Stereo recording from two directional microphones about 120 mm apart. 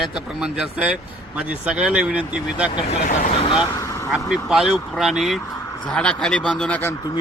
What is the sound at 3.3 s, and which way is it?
Speech, 50° left (ahead or behind).